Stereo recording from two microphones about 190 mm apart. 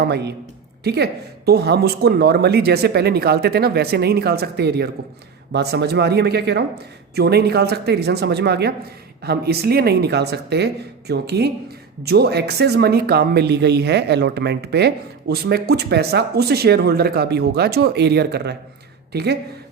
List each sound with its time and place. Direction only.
0.0 s speech: 60° right (ahead or behind)